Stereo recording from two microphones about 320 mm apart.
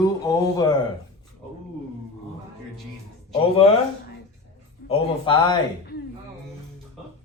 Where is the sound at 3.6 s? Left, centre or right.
Centre.